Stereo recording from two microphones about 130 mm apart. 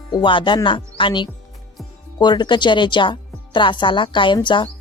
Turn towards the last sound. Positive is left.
turn(degrees=35)  # may be behind; listen again after turning